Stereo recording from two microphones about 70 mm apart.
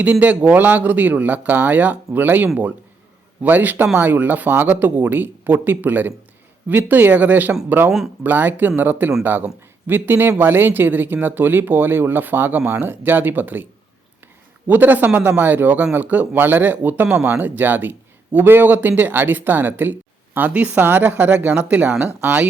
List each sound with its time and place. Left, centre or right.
0.0 s a man's voice: right
7.9 s speech: centre
8.2 s a man's voice: right
14.7 s a man's voice: right